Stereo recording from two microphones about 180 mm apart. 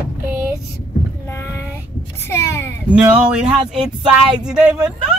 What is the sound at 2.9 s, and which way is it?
Speech, 5° right (ahead or behind).